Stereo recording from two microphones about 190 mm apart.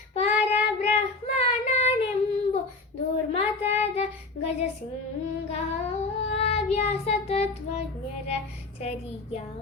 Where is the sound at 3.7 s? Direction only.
35° left (ahead or behind).